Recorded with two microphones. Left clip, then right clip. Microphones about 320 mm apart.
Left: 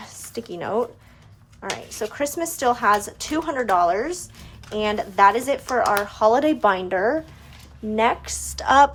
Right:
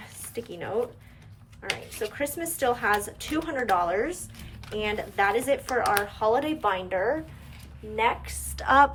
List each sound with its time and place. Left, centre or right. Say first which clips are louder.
0.3 s speech: left 5 dB; centre
6.1 s speech: left 7 dB; left
8.5 s speech: left 4 dB; centre